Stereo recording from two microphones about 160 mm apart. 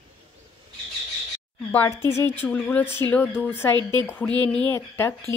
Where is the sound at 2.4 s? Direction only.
10° left (ahead or behind).